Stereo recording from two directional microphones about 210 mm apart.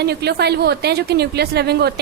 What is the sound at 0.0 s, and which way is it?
A woman's voice, 50° right (ahead or behind).